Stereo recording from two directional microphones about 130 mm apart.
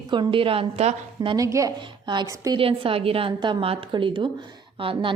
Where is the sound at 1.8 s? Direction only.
35° right (ahead or behind).